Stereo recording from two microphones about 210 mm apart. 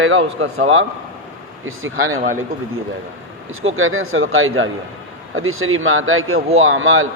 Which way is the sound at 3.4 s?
70° right (ahead or behind).